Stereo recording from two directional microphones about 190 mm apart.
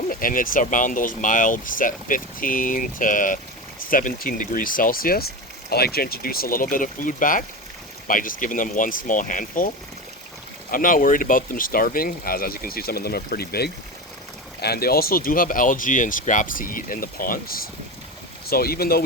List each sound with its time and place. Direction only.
0.1 s speech: 45° left (ahead or behind)